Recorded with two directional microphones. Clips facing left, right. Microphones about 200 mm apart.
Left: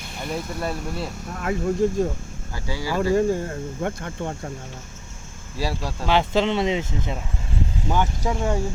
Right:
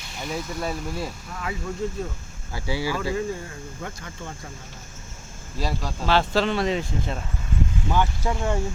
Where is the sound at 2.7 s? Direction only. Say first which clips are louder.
Right 2 dB; 10° right (ahead or behind).